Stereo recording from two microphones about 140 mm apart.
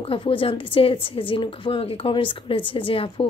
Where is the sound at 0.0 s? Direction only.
40° left (ahead or behind).